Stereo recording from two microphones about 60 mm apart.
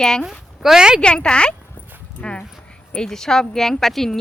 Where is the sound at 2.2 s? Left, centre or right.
Centre.